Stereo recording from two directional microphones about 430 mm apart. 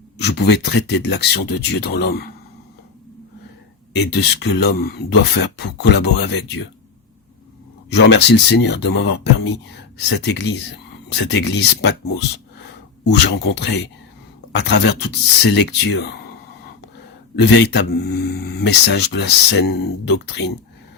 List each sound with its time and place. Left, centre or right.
0.2 s a sound: left
0.5 s speech: left
4.2 s speech: left
7.9 s speech: left
13.2 s speech: left
17.3 s speech: left